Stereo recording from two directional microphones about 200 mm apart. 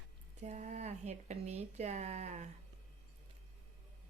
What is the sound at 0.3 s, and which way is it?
A woman's voice, 35° right (ahead or behind).